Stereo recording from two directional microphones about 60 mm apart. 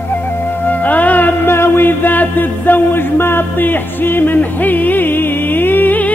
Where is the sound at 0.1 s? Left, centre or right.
Left.